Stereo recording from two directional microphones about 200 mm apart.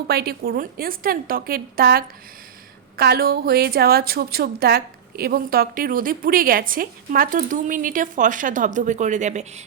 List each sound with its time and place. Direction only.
0.1 s a woman's voice: 50° right (ahead or behind); by 9.6 s 35° right (ahead or behind)